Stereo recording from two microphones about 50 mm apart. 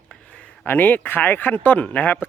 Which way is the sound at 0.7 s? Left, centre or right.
Left.